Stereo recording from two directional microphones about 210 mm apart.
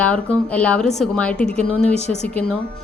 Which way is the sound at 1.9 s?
30° left (ahead or behind).